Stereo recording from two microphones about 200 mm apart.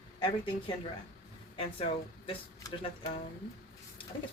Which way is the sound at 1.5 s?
30° left (ahead or behind).